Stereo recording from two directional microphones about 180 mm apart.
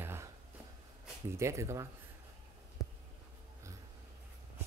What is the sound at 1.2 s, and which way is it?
Speech, 15° right (ahead or behind).